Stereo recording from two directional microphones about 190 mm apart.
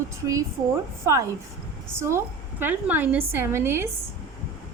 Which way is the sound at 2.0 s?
15° right (ahead or behind).